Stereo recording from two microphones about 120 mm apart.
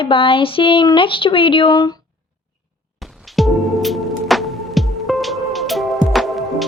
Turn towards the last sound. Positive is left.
turn(degrees=0)  # may be behind; listen again after turning